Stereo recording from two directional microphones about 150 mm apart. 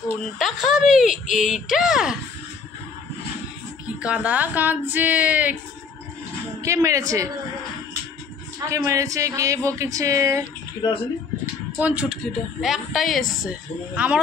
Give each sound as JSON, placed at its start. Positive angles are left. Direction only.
{"t": 0.4, "sound": "speech", "side_deg": 0}
{"t": 4.0, "sound": "speech", "side_deg": -10}
{"t": 6.6, "sound": "a man's voice", "side_deg": -20}
{"t": 8.5, "sound": "a man's voice", "side_deg": -20}
{"t": 10.8, "sound": "speech", "side_deg": 25}
{"t": 11.8, "sound": "speech", "side_deg": -5}